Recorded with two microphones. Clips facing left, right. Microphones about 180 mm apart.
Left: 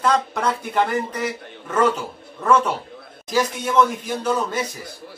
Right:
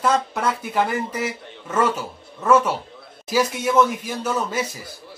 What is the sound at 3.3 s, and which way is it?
A man's voice, 10° right (ahead or behind).